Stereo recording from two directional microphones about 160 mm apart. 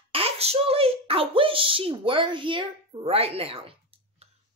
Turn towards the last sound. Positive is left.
turn(degrees=-35)  # may be behind; listen again after turning